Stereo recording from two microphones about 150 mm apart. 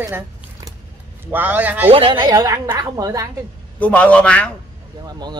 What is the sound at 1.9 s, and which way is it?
A woman's voice, 35° right (ahead or behind).